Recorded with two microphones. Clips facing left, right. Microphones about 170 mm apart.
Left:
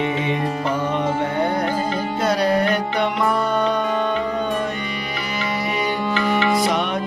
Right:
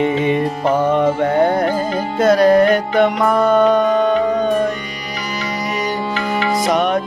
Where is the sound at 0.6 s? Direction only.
50° right (ahead or behind).